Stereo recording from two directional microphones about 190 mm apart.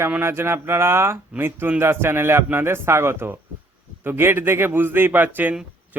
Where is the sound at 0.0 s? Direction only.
10° right (ahead or behind).